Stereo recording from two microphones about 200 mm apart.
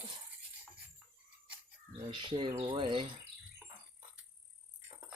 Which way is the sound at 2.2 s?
25° right (ahead or behind).